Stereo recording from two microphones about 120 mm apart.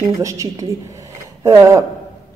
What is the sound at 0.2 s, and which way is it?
Speech, 25° right (ahead or behind).